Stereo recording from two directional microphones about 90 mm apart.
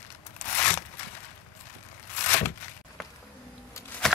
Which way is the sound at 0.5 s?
25° left (ahead or behind).